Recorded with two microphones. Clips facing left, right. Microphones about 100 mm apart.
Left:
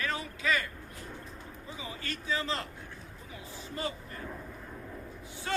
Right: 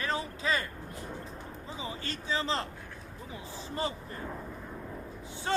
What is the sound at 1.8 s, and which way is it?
Speech, 30° right (ahead or behind).